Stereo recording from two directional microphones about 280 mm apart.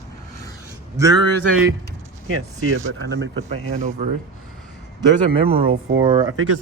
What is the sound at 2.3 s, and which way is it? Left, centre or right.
Speech, right.